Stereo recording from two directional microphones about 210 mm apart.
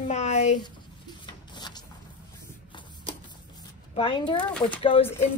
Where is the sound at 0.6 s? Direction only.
20° left (ahead or behind).